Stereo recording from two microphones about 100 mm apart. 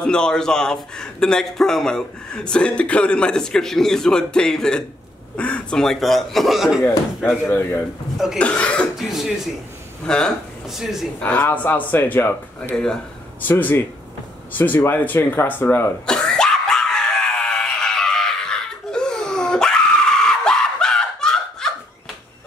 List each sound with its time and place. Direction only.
0.0 s a man's voice: 10° left (ahead or behind)
7.4 s speech: 25° left (ahead or behind)
8.4 s a man's voice: 10° left (ahead or behind)
8.9 s a man's voice: centre (ahead or behind)
10.7 s speech: 5° right (ahead or behind)
11.1 s a man's voice: 15° left (ahead or behind)
16.1 s throat clearing: 5° left (ahead or behind)